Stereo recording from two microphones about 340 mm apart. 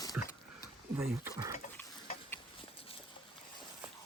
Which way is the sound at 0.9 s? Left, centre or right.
Centre.